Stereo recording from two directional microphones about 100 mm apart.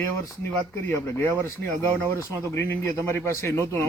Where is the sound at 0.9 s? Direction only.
25° left (ahead or behind).